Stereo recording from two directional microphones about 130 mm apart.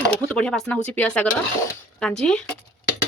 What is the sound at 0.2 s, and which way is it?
Speech, 5° left (ahead or behind).